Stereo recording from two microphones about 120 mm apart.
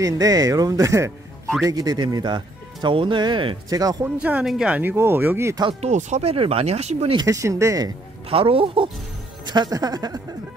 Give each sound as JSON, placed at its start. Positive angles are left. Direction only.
{"t": 0.0, "sound": "speech", "side_deg": -30}
{"t": 3.7, "sound": "speech", "side_deg": -30}
{"t": 4.2, "sound": "a woman's voice", "side_deg": -10}
{"t": 5.8, "sound": "speech", "side_deg": -75}
{"t": 6.3, "sound": "speech", "side_deg": -50}
{"t": 7.2, "sound": "speech", "side_deg": -30}
{"t": 8.3, "sound": "speech", "side_deg": -50}
{"t": 9.5, "sound": "speech", "side_deg": -35}